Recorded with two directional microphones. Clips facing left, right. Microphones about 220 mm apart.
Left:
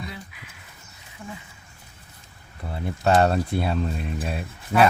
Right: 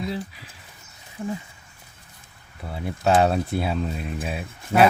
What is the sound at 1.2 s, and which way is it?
Speech, 35° right (ahead or behind).